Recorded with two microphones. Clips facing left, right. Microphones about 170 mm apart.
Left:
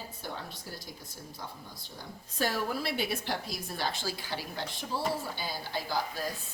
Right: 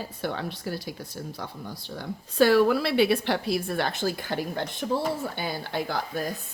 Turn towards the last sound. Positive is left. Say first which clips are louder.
# right 5 dB
turn(degrees=-60)  # may be behind; listen again after turning